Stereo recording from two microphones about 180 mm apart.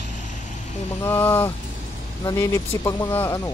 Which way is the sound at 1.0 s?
10° left (ahead or behind).